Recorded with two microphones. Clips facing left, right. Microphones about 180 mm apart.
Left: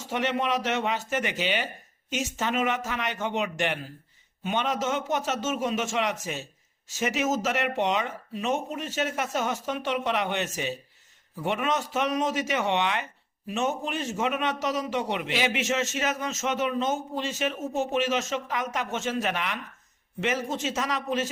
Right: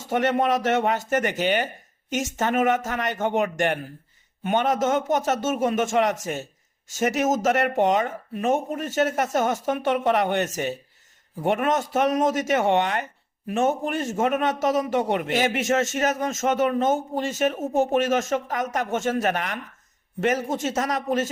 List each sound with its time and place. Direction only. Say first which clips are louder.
0.1 s a man's voice: right 5 dB; 45° right (ahead or behind)